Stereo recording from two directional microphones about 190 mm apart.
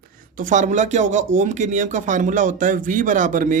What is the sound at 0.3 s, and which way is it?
Speech, 40° right (ahead or behind).